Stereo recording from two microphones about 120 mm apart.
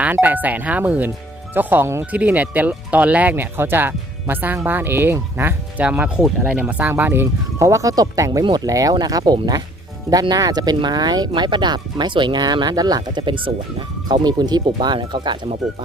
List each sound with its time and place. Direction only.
0.0 s speech: 15° right (ahead or behind); by 15.4 s 40° right (ahead or behind)